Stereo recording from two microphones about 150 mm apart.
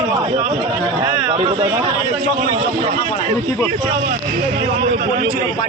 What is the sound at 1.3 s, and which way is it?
Speech, 30° right (ahead or behind).